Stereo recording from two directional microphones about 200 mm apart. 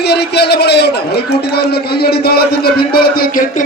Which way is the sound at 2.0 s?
50° left (ahead or behind).